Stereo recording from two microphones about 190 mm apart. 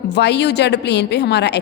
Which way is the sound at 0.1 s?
65° left (ahead or behind).